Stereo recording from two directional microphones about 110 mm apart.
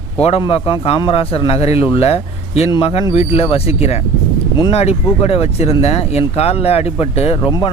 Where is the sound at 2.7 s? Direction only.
55° left (ahead or behind).